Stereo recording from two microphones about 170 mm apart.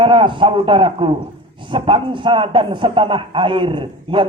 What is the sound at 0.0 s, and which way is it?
A man's voice, 30° right (ahead or behind).